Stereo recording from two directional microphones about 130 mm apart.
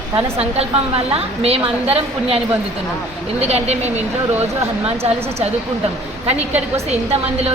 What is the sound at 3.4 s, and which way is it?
Speech, 55° right (ahead or behind).